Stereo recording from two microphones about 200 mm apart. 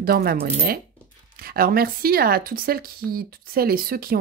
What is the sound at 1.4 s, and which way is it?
Speech, 50° right (ahead or behind).